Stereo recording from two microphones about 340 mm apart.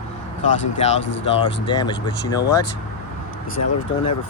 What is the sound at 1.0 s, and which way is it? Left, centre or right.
Speech, left.